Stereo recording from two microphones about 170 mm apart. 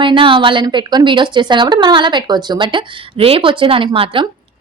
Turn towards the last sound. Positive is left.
turn(degrees=-30)  # may be behind; listen again after turning